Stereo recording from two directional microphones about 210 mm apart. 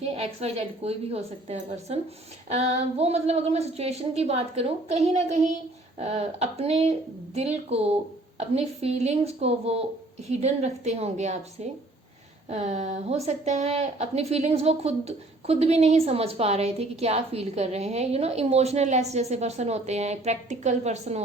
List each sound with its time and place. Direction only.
0.0 s a woman's voice: 30° right (ahead or behind)